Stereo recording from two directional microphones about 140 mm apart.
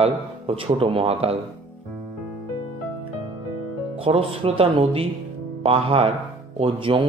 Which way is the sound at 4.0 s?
40° right (ahead or behind).